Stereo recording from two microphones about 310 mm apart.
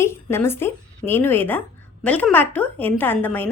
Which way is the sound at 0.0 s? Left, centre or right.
Centre.